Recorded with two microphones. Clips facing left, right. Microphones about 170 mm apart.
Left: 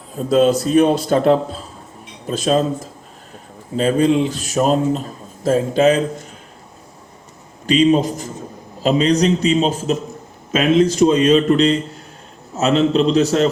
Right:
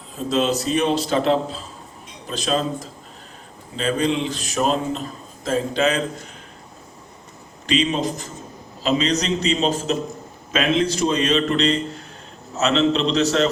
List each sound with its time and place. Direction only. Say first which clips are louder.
0.3 s a man's voice: left 6 dB; 50° left (ahead or behind)
3.8 s a man's voice: left 6 dB; 45° left (ahead or behind)
7.7 s a man's voice: left 7 dB; 45° left (ahead or behind)
11.3 s a man's voice: left 5 dB; 10° left (ahead or behind)